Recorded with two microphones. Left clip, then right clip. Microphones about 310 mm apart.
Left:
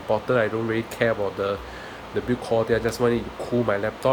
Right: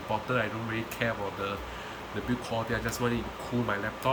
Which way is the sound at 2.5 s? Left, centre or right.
Centre.